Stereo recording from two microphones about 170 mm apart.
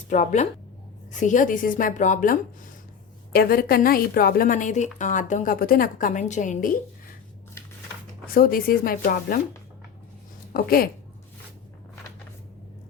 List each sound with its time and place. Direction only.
0.1 s a woman's voice: 45° left (ahead or behind)
3.3 s a woman's voice: 60° left (ahead or behind)
8.3 s speech: 60° left (ahead or behind)
10.5 s speech: 60° left (ahead or behind)